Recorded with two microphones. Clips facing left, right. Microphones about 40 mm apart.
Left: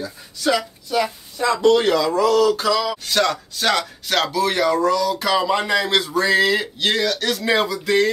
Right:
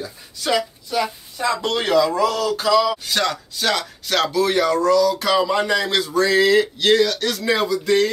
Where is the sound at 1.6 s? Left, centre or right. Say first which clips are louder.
Left 8 dB; right.